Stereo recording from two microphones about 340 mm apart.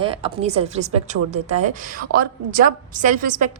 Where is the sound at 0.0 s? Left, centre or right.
Centre.